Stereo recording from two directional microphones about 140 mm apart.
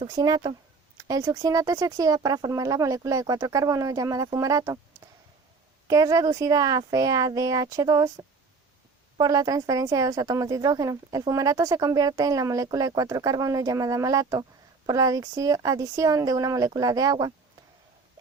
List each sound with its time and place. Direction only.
0.0 s speech: 30° right (ahead or behind)
5.9 s speech: 25° right (ahead or behind)